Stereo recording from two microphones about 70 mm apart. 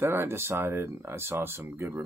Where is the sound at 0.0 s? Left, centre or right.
Right.